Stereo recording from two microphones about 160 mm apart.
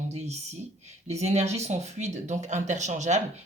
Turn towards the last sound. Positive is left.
turn(degrees=-45)  # may be behind; listen again after turning